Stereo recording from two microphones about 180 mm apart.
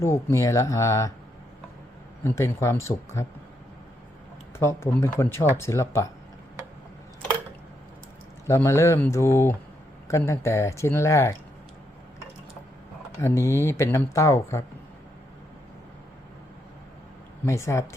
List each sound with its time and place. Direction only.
0.0 s speech: 15° left (ahead or behind)
2.2 s speech: 15° left (ahead or behind)
4.5 s speech: 15° left (ahead or behind)
8.4 s speech: 15° left (ahead or behind)
13.2 s speech: 15° left (ahead or behind)
17.4 s speech: 15° left (ahead or behind)